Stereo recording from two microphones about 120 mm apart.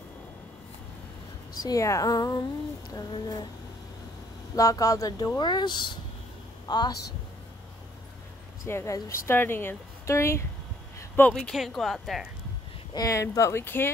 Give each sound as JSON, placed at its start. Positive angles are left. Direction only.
{"t": 1.6, "sound": "speech", "side_deg": 30}
{"t": 4.6, "sound": "speech", "side_deg": 30}
{"t": 8.6, "sound": "speech", "side_deg": 25}
{"t": 11.0, "sound": "a sound", "side_deg": 15}
{"t": 11.3, "sound": "speech", "side_deg": 0}
{"t": 12.9, "sound": "speech", "side_deg": 30}